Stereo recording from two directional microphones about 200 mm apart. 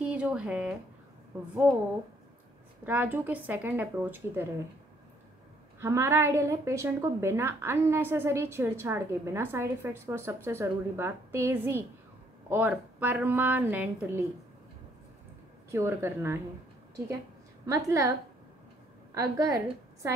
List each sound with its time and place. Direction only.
0.0 s a sound: 5° right (ahead or behind)
2.8 s a woman's voice: 10° right (ahead or behind)
5.8 s a woman's voice: 15° right (ahead or behind)
15.7 s a woman's voice: 15° right (ahead or behind)
17.6 s a woman's voice: 15° right (ahead or behind)
19.1 s a woman's voice: 15° right (ahead or behind)